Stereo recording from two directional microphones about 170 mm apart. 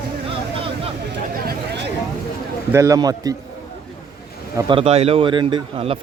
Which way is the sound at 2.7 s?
20° right (ahead or behind).